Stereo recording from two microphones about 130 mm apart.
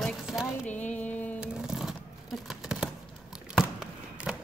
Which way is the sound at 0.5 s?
10° left (ahead or behind).